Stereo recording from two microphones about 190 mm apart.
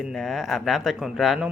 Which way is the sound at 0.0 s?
Centre (ahead or behind).